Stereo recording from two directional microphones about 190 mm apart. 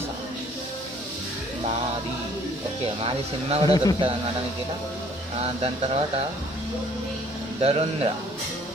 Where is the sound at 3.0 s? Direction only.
30° right (ahead or behind).